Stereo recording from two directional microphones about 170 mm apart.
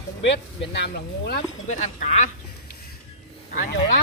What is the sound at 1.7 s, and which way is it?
Speech, 45° left (ahead or behind).